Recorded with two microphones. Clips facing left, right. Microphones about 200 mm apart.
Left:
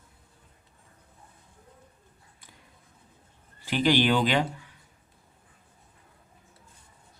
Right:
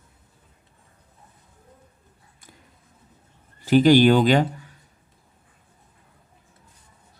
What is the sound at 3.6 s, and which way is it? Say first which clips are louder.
Speech: right 9 dB; 45° right (ahead or behind).